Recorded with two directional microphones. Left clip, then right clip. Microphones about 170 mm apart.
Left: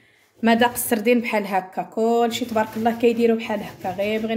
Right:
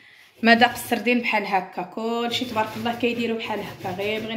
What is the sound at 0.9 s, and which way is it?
Speech, 55° left (ahead or behind).